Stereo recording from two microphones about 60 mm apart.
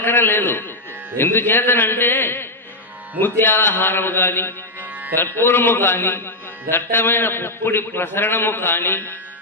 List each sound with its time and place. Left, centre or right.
0.0 s a man's voice: left